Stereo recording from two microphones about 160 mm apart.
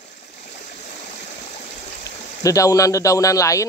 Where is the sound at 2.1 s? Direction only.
20° left (ahead or behind).